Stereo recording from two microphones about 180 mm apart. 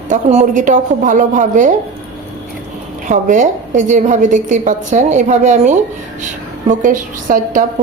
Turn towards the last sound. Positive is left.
turn(degrees=-45)  # may be behind; listen again after turning